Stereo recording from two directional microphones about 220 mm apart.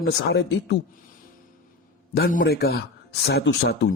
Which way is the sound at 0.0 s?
50° left (ahead or behind).